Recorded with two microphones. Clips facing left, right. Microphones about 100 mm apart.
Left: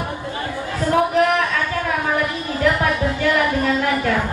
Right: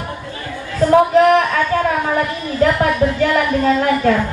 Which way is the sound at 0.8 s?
25° right (ahead or behind).